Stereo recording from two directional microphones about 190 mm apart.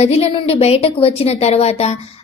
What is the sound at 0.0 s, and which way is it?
A woman's voice, 30° left (ahead or behind).